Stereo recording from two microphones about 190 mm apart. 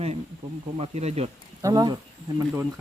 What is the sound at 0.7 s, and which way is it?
Speech, 35° right (ahead or behind).